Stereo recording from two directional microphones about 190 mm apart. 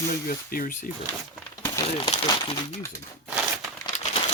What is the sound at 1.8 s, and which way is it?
Speech, 30° left (ahead or behind).